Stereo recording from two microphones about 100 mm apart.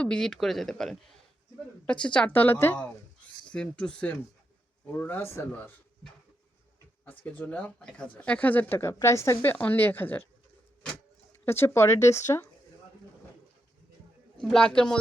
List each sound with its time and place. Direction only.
0.0 s speech: 10° left (ahead or behind); by 5.5 s 25° left (ahead or behind)
5.5 s speech: 15° left (ahead or behind)
7.0 s speech: 15° left (ahead or behind); by 9.5 s 30° left (ahead or behind)
9.5 s speech: 20° left (ahead or behind)
11.4 s speech: 25° left (ahead or behind)
14.4 s speech: 5° left (ahead or behind)